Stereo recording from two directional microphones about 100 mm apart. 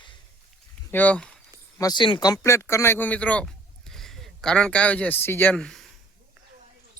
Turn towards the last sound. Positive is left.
turn(degrees=5)  # may be behind; listen again after turning